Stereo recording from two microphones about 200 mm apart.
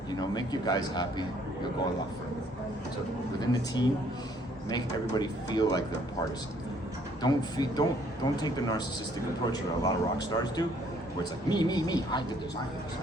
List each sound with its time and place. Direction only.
0.1 s a man's voice: 20° left (ahead or behind)
3.4 s a man's voice: 20° left (ahead or behind)
7.2 s a man's voice: 20° left (ahead or behind)